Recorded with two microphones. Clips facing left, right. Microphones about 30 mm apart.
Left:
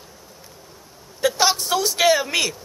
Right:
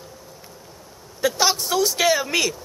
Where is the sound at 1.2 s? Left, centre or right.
Centre.